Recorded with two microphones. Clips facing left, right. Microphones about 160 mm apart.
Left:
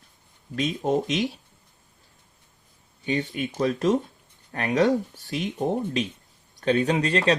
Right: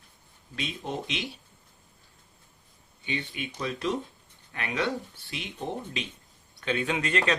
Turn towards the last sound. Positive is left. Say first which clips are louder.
# left 5 dB
turn(degrees=35)  # may be behind; listen again after turning